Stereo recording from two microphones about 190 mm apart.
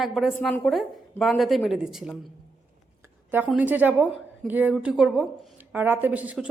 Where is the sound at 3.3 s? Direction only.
5° right (ahead or behind).